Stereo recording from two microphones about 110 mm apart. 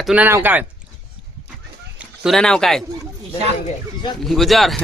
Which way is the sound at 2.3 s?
5° left (ahead or behind).